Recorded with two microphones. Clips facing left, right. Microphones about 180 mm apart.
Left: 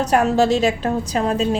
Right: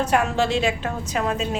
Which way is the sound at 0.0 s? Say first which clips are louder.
Left 5 dB; 40° left (ahead or behind).